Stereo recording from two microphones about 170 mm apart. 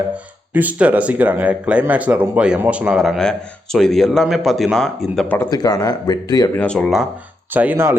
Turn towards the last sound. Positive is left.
turn(degrees=-10)  # may be behind; listen again after turning